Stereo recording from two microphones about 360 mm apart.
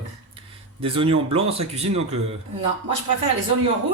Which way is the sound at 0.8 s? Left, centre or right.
Centre.